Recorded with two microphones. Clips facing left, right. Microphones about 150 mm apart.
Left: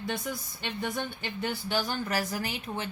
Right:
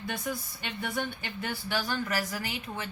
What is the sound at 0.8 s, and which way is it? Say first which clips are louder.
A woman's voice: even; 30° left (ahead or behind).